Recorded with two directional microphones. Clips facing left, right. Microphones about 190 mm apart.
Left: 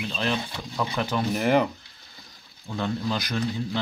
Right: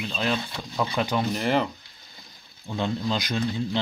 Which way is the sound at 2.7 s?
20° right (ahead or behind).